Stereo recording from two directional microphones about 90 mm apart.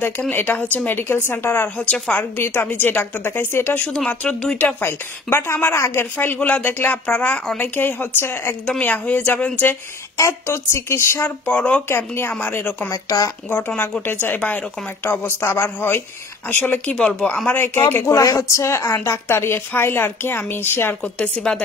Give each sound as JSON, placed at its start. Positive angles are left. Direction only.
{"t": 0.3, "sound": "a woman's voice", "side_deg": 25}
{"t": 3.8, "sound": "speech", "side_deg": 10}
{"t": 4.6, "sound": "a woman's voice", "side_deg": 20}
{"t": 10.1, "sound": "a woman's voice", "side_deg": 35}
{"t": 11.2, "sound": "a woman's voice", "side_deg": 15}
{"t": 12.9, "sound": "a woman's voice", "side_deg": 40}
{"t": 13.5, "sound": "a woman's voice", "side_deg": 20}
{"t": 21.0, "sound": "speech", "side_deg": 10}